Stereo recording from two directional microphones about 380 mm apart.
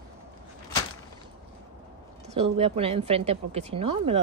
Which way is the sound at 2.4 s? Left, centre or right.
Centre.